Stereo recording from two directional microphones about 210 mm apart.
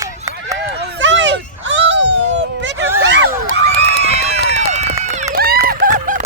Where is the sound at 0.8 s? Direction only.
60° right (ahead or behind).